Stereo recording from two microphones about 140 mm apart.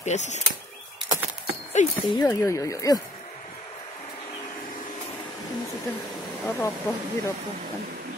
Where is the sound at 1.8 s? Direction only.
60° left (ahead or behind).